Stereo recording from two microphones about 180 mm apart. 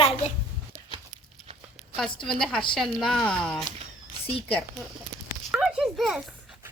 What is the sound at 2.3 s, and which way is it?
Speech, 5° left (ahead or behind).